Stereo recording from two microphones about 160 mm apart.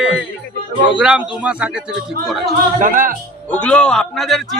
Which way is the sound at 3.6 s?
5° left (ahead or behind).